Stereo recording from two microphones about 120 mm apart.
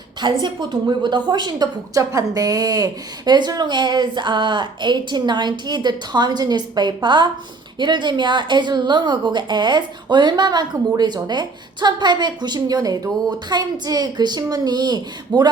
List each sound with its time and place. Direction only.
0.2 s a woman's voice: 40° right (ahead or behind)